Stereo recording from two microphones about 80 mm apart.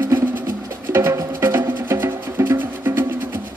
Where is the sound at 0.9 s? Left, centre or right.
Right.